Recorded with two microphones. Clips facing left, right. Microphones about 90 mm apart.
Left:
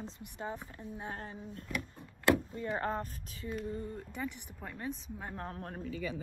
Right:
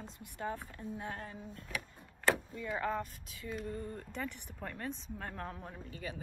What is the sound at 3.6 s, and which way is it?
Speech, 15° left (ahead or behind).